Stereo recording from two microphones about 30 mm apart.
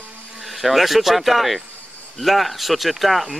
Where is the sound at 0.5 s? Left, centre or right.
Centre.